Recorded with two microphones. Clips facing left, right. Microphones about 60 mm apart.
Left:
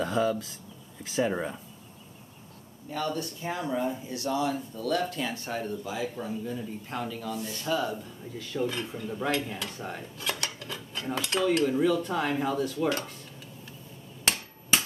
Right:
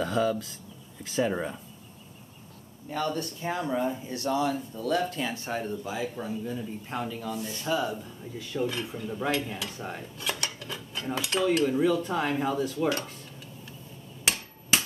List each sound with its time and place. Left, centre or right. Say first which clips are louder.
0.0 s speech: even; centre
2.9 s speech: right 1 dB; right
4.7 s speech: right 1 dB; right
8.4 s cutlery: even; centre